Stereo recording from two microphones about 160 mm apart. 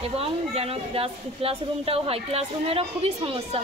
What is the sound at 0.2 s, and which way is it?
A woman's voice, 35° right (ahead or behind).